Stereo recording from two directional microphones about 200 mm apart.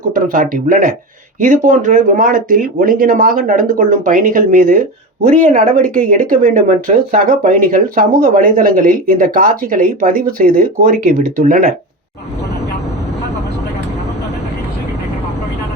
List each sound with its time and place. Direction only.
0.0 s speech: 45° right (ahead or behind)